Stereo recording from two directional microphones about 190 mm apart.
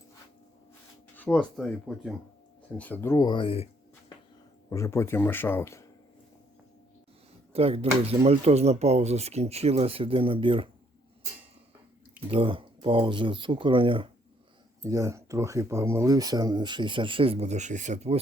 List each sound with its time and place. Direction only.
1.1 s speech: 5° left (ahead or behind); by 3.7 s 30° left (ahead or behind)
4.7 s speech: 15° left (ahead or behind)
7.5 s speech: 30° right (ahead or behind)
12.3 s speech: 30° right (ahead or behind)
14.8 s speech: 15° right (ahead or behind); by 18.2 s 35° right (ahead or behind)